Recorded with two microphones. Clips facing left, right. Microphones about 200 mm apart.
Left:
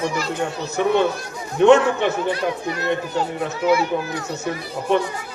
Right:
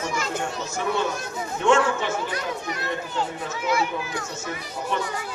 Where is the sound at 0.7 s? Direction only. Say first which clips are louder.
Left 8 dB; 65° left (ahead or behind).